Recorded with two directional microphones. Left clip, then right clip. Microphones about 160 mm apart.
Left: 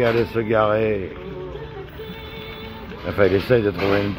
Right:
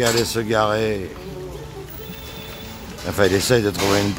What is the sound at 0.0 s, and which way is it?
Speech, 15° right (ahead or behind).